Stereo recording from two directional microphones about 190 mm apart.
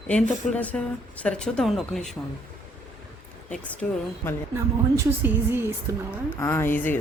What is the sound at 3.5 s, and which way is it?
Speech, 5° left (ahead or behind).